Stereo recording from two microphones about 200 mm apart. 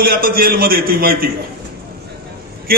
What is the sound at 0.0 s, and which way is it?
A man's voice, 45° right (ahead or behind).